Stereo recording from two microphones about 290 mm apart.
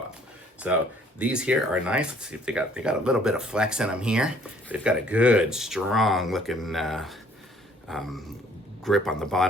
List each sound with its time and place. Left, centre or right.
0.7 s speech: centre